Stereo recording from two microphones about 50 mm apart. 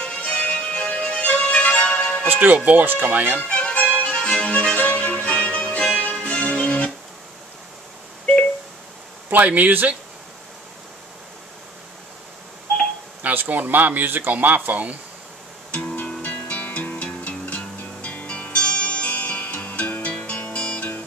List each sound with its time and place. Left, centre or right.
0.0 s music: left
2.2 s speech: right
3.4 s music: left
9.3 s speech: right
13.2 s speech: right
16.2 s music: left